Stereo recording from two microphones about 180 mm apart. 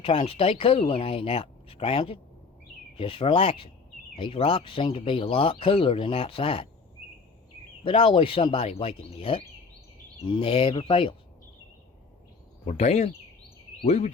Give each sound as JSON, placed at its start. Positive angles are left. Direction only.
{"t": 0.0, "sound": "speech", "side_deg": 30}
{"t": 7.9, "sound": "speech", "side_deg": 30}
{"t": 10.2, "sound": "speech", "side_deg": 30}
{"t": 12.6, "sound": "speech", "side_deg": 35}